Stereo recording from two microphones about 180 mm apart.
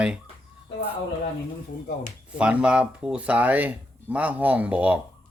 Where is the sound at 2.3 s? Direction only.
5° right (ahead or behind).